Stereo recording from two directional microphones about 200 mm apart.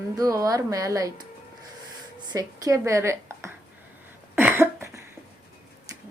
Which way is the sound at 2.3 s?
15° right (ahead or behind).